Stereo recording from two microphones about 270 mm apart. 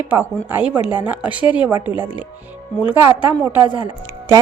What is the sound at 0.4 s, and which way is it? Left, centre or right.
A woman's voice, centre.